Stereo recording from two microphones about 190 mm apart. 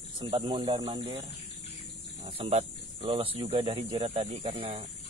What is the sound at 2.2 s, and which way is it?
Speech, 30° right (ahead or behind).